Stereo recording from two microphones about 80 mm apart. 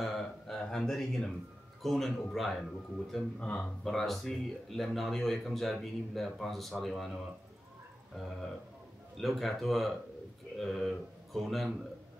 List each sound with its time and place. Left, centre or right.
0.0 s a sound: centre
1.8 s speech: centre
3.3 s speech: centre
3.8 s speech: centre
9.1 s speech: centre